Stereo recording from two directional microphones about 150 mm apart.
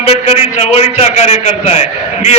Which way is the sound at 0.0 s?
45° left (ahead or behind).